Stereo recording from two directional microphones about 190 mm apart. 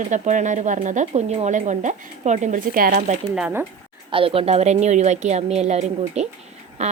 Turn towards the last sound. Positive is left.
turn(degrees=-35)  # may be behind; listen again after turning